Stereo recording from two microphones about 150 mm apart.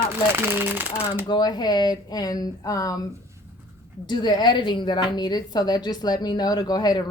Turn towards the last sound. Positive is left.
turn(degrees=25)  # may be behind; listen again after turning